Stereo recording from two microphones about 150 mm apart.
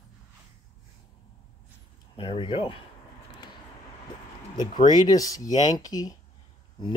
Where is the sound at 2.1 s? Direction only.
35° left (ahead or behind).